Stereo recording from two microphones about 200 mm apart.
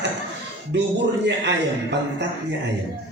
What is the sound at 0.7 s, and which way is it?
A man's voice, 60° right (ahead or behind).